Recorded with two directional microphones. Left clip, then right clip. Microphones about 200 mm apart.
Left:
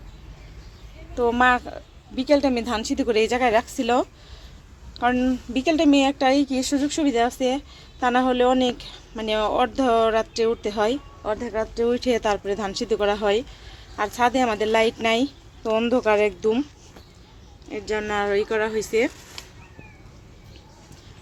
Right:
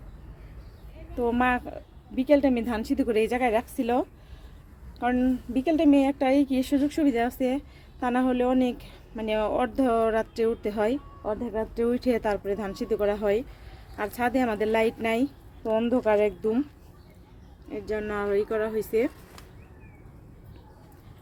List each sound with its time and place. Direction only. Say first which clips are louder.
1.1 s speech: left 6 dB; 10° right (ahead or behind)
2.1 s a woman's voice: left 2 dB; 15° left (ahead or behind)
2.6 s speech: left 4 dB; 15° right (ahead or behind)
11.5 s speech: left 5 dB; 20° right (ahead or behind); by 16.6 s centre (ahead or behind)
17.7 s speech: left 5 dB; centre (ahead or behind)